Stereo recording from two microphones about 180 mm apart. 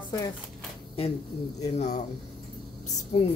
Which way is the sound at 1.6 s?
40° left (ahead or behind).